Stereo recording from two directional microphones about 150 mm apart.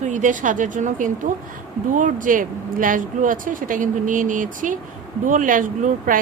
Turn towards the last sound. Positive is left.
turn(degrees=-65)  # may be behind; listen again after turning